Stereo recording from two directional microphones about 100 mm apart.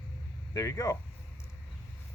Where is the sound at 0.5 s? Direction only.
35° left (ahead or behind).